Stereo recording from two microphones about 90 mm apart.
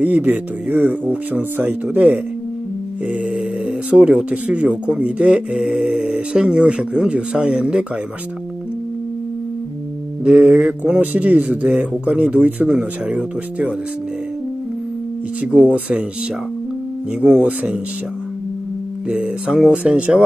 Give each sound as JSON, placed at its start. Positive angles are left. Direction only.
{"t": 0.0, "sound": "speech", "side_deg": -20}
{"t": 10.2, "sound": "speech", "side_deg": -10}
{"t": 15.4, "sound": "speech", "side_deg": -15}
{"t": 17.2, "sound": "speech", "side_deg": -15}
{"t": 19.0, "sound": "speech", "side_deg": -10}